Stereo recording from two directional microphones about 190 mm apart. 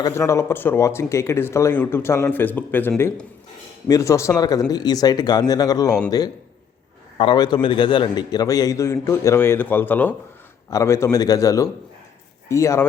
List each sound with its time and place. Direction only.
0.0 s a man's voice: 15° left (ahead or behind)